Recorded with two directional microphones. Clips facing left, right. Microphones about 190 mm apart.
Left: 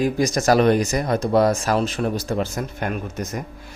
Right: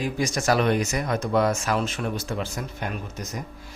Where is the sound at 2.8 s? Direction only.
55° left (ahead or behind).